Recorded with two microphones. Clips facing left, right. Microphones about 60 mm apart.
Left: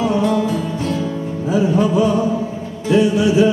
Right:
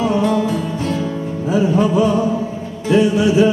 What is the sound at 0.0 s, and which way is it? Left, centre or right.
Music, right.